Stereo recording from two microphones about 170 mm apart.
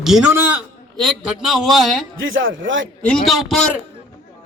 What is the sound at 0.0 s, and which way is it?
A man's voice, 5° right (ahead or behind).